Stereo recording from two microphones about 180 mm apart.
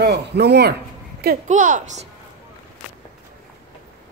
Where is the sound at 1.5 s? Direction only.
45° right (ahead or behind).